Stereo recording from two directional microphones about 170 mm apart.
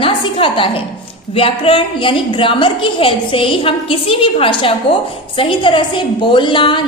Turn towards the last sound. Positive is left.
turn(degrees=30)  # may be behind; listen again after turning